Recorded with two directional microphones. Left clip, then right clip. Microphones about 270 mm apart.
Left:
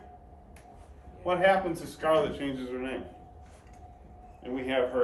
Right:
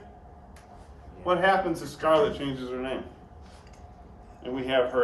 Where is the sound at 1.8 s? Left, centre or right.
Centre.